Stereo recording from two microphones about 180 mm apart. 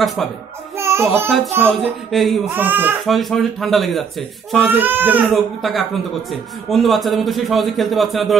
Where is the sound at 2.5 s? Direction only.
10° right (ahead or behind).